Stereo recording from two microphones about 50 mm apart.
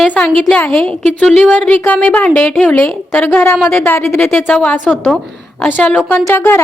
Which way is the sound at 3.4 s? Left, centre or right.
Left.